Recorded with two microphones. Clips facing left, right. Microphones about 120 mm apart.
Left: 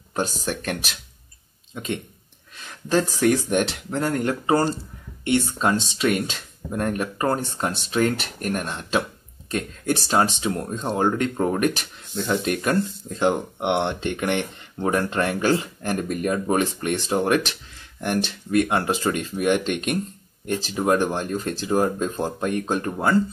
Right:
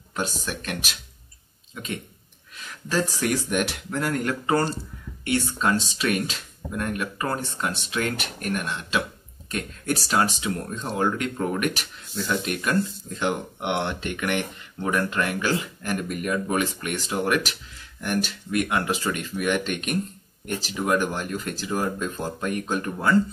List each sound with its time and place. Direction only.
2.5 s speech: 25° left (ahead or behind)